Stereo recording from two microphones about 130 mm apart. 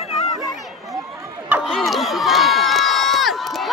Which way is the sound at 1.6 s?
Centre (ahead or behind).